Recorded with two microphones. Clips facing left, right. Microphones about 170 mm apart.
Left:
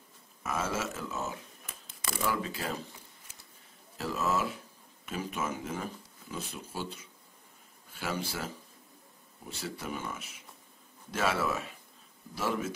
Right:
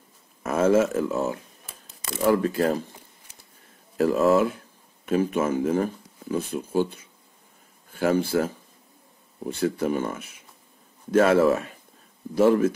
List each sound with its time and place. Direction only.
0.4 s speech: 55° right (ahead or behind)
4.0 s speech: 55° right (ahead or behind)